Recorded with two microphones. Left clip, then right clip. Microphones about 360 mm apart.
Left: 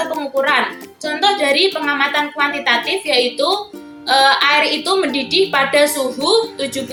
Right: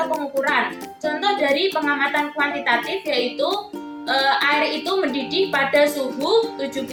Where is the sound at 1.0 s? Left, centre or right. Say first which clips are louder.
Left 5 dB; right.